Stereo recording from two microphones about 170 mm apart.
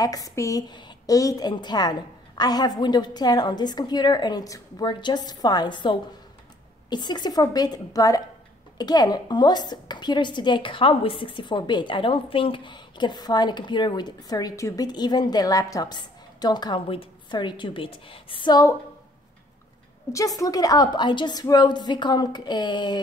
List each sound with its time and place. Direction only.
0.0 s a woman's voice: 20° left (ahead or behind)
20.1 s a woman's voice: 20° left (ahead or behind)